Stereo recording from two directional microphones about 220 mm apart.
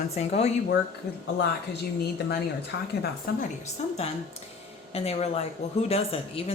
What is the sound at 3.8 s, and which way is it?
A woman's voice, 30° left (ahead or behind).